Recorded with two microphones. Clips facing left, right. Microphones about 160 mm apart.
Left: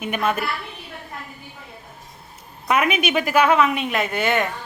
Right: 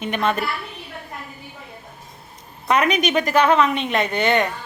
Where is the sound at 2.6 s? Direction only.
5° left (ahead or behind).